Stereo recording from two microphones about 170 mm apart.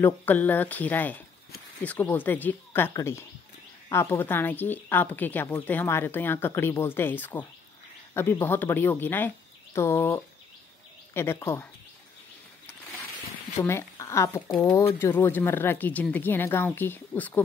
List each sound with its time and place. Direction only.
0.0 s speech: 10° left (ahead or behind)
13.6 s speech: 15° left (ahead or behind)